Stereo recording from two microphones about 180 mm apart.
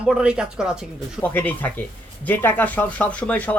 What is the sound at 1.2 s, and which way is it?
Speech, 10° left (ahead or behind).